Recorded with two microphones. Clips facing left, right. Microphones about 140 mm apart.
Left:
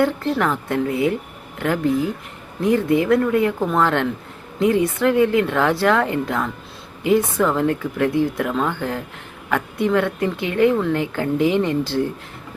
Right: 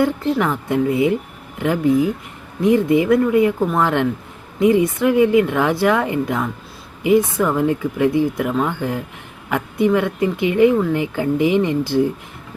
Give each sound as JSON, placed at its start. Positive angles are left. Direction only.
{"t": 0.0, "sound": "speech", "side_deg": -15}